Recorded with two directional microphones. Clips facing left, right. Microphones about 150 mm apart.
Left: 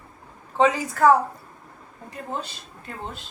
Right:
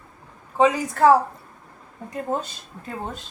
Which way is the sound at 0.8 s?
25° right (ahead or behind).